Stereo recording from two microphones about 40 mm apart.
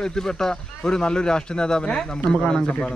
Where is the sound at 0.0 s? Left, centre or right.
Centre.